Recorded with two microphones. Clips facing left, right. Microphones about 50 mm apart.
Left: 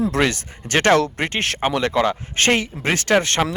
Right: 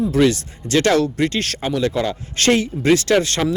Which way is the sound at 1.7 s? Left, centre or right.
Left.